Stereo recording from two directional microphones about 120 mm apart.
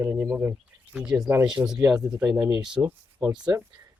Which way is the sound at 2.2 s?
20° right (ahead or behind).